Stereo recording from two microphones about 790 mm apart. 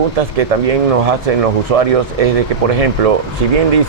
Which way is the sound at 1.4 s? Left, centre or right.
Right.